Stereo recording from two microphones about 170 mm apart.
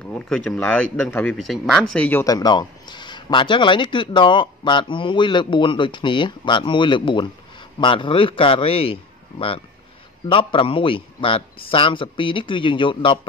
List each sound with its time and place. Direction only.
0.1 s speech: 5° left (ahead or behind)
2.2 s a man's voice: 20° left (ahead or behind)